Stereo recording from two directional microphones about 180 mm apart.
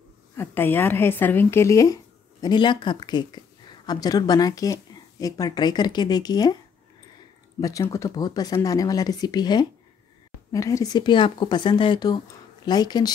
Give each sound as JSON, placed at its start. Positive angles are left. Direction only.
{"t": 0.4, "sound": "a woman's voice", "side_deg": 10}
{"t": 7.6, "sound": "speech", "side_deg": 15}